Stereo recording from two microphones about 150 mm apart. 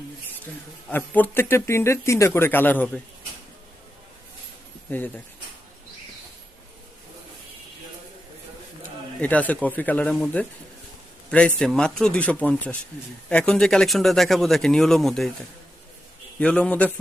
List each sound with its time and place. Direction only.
0.9 s speech: 10° left (ahead or behind)
4.9 s speech: 15° left (ahead or behind)
9.2 s speech: 10° left (ahead or behind)
16.4 s speech: 5° left (ahead or behind)